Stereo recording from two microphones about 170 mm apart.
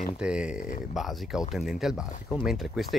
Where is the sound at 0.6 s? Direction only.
50° left (ahead or behind).